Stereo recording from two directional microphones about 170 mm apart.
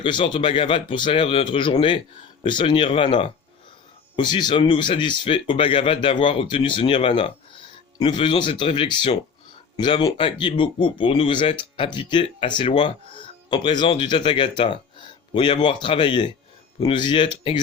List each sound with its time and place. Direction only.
0.0 s speech: 30° left (ahead or behind)